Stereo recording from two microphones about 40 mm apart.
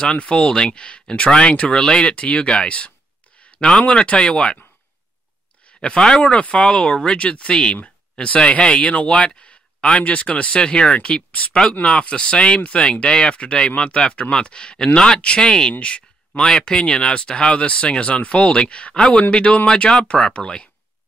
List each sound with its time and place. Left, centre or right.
0.0 s speech: left
5.8 s speech: left